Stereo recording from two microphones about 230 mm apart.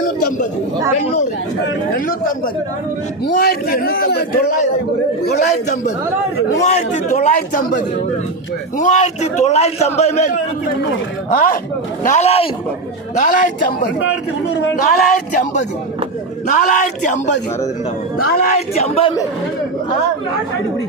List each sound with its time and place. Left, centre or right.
2.0 s a man's voice: left
6.7 s a man's voice: left